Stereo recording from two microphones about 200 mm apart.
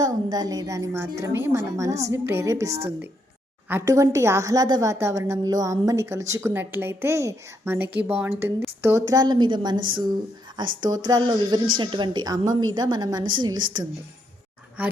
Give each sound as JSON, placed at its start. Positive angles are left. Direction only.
{"t": 0.0, "sound": "a woman's voice", "side_deg": -20}
{"t": 14.8, "sound": "speech", "side_deg": -5}